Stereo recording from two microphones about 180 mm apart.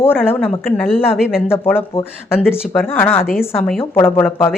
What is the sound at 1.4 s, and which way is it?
Speech, 15° left (ahead or behind).